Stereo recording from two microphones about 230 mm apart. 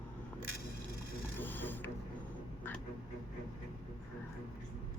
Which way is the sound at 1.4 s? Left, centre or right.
Centre.